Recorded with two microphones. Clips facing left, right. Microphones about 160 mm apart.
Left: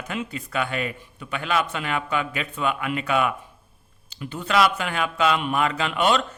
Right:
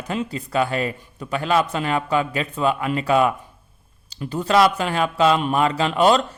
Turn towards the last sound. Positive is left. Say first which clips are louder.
# right 5 dB
turn(degrees=-35)  # may be behind; listen again after turning